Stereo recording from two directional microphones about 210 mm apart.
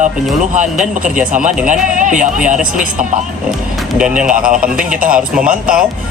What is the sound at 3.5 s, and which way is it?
Speech, 5° right (ahead or behind).